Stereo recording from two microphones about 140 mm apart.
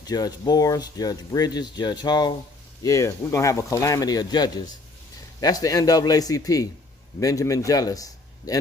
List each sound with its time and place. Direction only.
0.0 s a man's voice: 30° left (ahead or behind)